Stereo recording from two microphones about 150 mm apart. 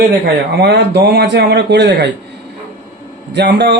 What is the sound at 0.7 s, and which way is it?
Speech, 90° right.